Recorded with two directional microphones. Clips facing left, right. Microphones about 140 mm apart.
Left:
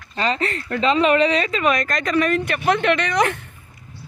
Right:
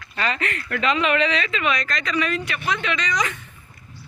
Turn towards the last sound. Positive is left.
turn(degrees=60)  # may be behind; listen again after turning